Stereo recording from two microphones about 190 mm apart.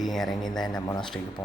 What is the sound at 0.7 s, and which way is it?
Speech, 20° left (ahead or behind).